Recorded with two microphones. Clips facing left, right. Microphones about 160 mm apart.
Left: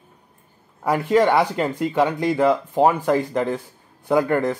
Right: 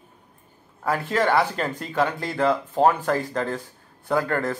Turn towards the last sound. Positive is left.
turn(degrees=20)  # may be behind; listen again after turning